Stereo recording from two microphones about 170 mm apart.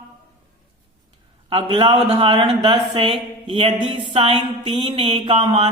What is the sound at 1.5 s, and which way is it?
Speech, 30° right (ahead or behind).